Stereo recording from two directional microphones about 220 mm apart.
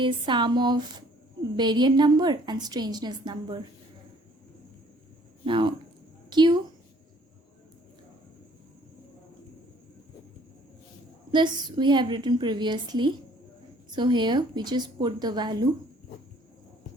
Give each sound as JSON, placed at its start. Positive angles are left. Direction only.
{"t": 0.0, "sound": "a woman's voice", "side_deg": -20}
{"t": 5.5, "sound": "a woman's voice", "side_deg": -20}
{"t": 11.3, "sound": "a woman's voice", "side_deg": -20}